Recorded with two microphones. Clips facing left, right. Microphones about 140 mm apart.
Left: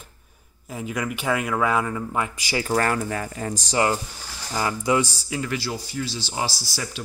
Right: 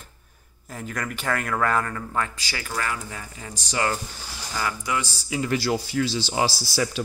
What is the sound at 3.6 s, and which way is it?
Speech, 25° left (ahead or behind).